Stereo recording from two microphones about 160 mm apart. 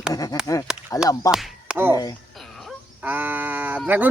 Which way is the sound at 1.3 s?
5° right (ahead or behind).